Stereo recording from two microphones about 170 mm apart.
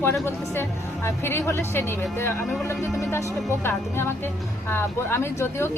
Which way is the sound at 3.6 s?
15° left (ahead or behind).